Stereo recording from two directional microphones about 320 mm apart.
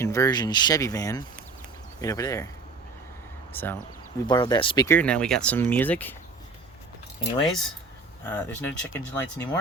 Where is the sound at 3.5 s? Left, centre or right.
Centre.